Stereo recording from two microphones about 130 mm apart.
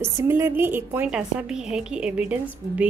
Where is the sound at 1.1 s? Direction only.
5° right (ahead or behind).